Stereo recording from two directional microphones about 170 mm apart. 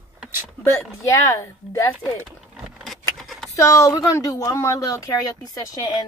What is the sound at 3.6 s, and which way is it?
Speech, 20° left (ahead or behind).